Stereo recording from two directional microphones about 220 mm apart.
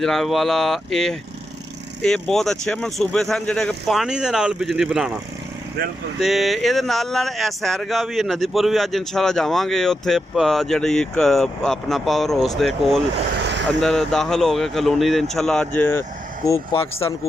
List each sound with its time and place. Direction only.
0.0 s speech: centre (ahead or behind)
6.1 s speech: centre (ahead or behind)
16.5 s speech: 25° left (ahead or behind)